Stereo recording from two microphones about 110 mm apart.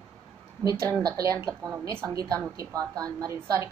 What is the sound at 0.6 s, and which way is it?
A woman's voice, 30° right (ahead or behind).